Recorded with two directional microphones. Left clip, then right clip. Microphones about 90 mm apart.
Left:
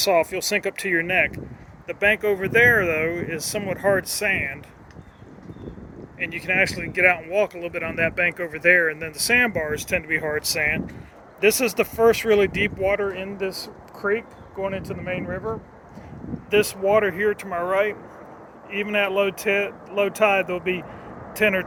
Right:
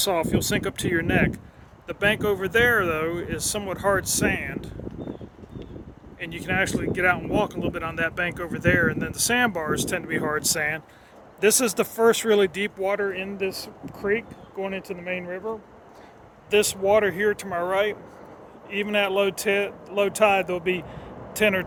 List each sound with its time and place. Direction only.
0.1 s speech: 40° right (ahead or behind)
1.9 s speech: 35° right (ahead or behind)
6.2 s speech: 55° right (ahead or behind)
8.1 s speech: 35° right (ahead or behind)
9.0 s speech: 45° right (ahead or behind); by 10.8 s 65° right (ahead or behind)
11.3 s speech: 55° right (ahead or behind)
16.5 s speech: 50° right (ahead or behind)